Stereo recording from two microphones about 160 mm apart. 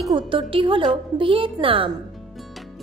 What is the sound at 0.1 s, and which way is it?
A woman's voice, 30° right (ahead or behind).